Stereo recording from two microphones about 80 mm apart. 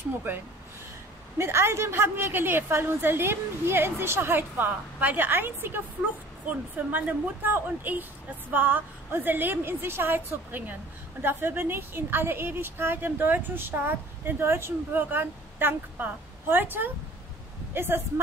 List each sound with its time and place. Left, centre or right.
1.4 s a woman's voice: right
6.9 s a woman's voice: right